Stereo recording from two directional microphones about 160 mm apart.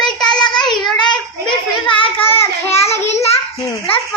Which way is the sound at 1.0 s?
30° left (ahead or behind).